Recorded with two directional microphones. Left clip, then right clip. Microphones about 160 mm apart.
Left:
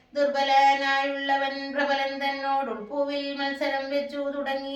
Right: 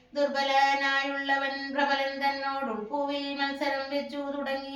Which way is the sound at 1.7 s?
20° left (ahead or behind).